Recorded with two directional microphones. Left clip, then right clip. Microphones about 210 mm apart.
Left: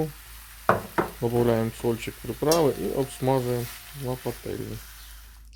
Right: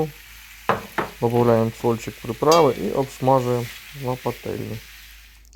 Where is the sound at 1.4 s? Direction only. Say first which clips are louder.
Right 6 dB; 5° right (ahead or behind).